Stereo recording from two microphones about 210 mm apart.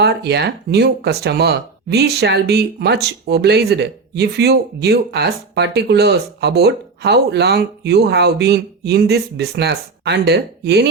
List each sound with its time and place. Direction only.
0.0 s speech: 50° right (ahead or behind)